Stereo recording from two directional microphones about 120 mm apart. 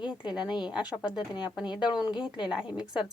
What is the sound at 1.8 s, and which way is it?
Speech, 10° right (ahead or behind).